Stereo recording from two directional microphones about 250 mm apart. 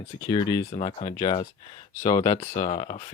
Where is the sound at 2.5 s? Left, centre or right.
Left.